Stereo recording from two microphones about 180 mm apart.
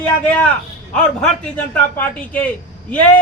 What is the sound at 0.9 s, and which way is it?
A man's voice, 5° left (ahead or behind).